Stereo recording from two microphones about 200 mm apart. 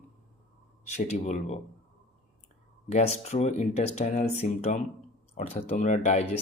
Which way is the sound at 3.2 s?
35° left (ahead or behind).